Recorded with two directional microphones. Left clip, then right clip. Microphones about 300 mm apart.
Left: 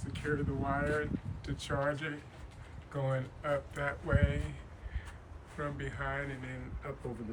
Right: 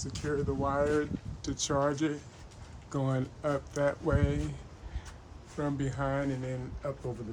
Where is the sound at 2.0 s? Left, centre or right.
Centre.